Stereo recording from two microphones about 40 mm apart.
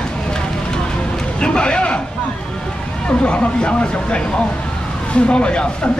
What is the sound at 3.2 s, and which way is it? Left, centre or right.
A woman's voice, left.